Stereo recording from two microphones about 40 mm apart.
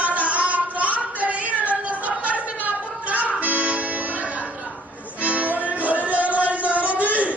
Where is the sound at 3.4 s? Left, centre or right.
Right.